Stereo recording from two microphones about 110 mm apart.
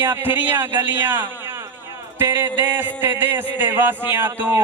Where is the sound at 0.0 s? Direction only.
20° right (ahead or behind).